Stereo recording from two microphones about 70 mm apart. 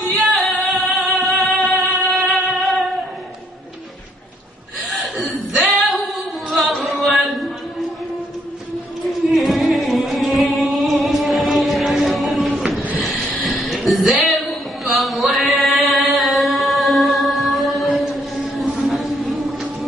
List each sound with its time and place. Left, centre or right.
0.2 s music: centre
4.8 s singing: centre
9.0 s music: centre
13.0 s vehicle: centre
13.8 s a sound: centre
18.9 s chant: centre